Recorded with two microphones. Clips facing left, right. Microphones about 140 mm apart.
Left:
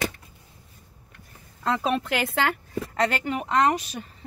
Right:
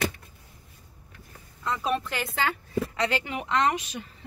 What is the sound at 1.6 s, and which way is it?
A woman's voice, 90° left.